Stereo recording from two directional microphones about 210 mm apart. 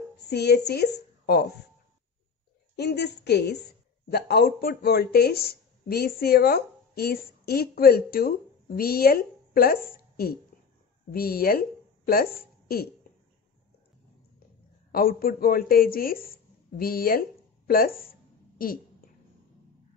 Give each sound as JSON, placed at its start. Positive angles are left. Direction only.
{"t": 0.3, "sound": "a woman's voice", "side_deg": 50}
{"t": 2.7, "sound": "a woman's voice", "side_deg": 50}
{"t": 14.9, "sound": "speech", "side_deg": 45}